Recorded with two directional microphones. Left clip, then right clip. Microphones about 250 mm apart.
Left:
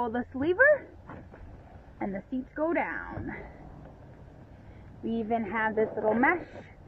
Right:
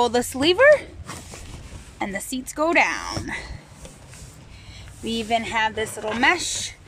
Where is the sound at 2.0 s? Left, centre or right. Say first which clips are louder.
Right 7 dB; centre.